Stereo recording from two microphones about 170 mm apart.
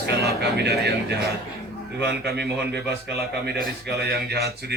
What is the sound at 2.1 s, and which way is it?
Speech, 75° right (ahead or behind).